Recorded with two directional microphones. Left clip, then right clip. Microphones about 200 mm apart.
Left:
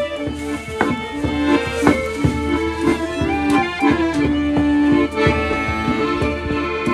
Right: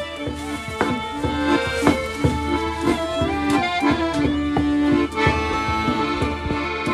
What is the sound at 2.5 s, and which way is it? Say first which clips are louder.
Music: left 5 dB; 5° right (ahead or behind).